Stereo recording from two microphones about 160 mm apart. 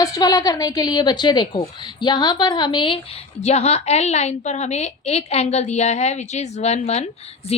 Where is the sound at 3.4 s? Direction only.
40° left (ahead or behind).